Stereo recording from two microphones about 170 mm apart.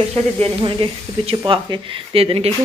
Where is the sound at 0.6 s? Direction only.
30° right (ahead or behind).